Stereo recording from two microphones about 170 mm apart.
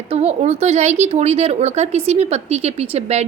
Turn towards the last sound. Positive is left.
turn(degrees=-40)  # may be behind; listen again after turning